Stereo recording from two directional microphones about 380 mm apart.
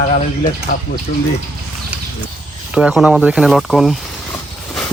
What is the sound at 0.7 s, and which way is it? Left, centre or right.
Speech, left.